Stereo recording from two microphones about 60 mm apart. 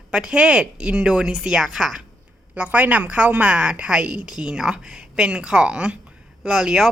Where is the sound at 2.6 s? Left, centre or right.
Right.